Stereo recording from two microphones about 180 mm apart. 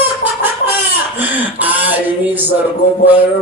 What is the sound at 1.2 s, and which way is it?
A man's voice, 10° right (ahead or behind).